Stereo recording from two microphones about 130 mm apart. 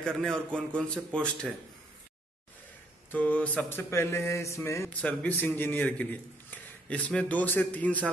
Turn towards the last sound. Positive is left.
turn(degrees=10)  # may be behind; listen again after turning